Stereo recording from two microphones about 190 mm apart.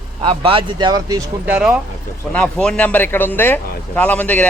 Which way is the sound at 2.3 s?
5° left (ahead or behind).